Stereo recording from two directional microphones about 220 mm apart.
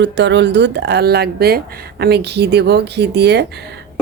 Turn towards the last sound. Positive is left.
turn(degrees=-50)  # may be behind; listen again after turning